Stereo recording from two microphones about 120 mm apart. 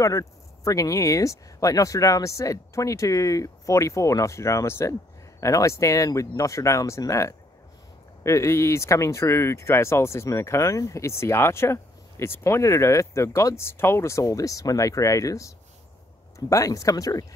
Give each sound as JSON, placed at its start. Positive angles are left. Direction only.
{"t": 0.0, "sound": "speech", "side_deg": 25}